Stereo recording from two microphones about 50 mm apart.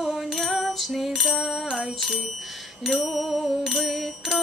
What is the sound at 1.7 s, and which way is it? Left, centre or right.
Music, centre.